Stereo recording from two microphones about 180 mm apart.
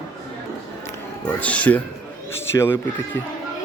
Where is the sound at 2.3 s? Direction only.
15° left (ahead or behind).